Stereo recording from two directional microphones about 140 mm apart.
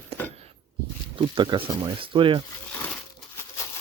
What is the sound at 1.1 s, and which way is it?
Speech, 35° right (ahead or behind).